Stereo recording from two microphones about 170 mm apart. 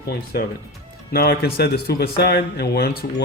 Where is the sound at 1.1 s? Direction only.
65° left (ahead or behind).